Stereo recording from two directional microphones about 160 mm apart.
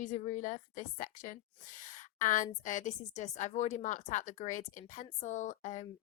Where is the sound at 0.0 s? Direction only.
50° left (ahead or behind).